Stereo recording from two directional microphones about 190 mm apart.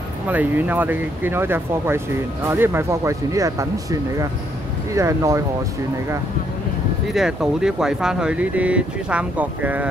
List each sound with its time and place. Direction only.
0.3 s speech: 10° right (ahead or behind)
7.2 s speech: 5° right (ahead or behind)